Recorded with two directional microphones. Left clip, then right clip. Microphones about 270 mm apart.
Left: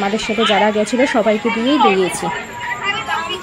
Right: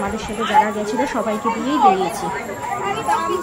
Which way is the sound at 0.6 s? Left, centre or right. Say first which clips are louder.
Left 2 dB; centre.